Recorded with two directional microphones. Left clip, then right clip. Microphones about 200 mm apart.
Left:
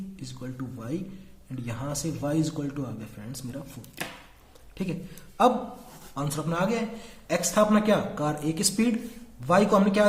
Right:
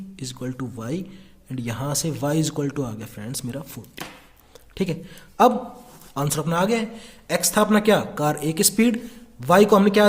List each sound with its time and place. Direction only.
0.2 s speech: 50° right (ahead or behind)
4.7 s a man's voice: 50° right (ahead or behind)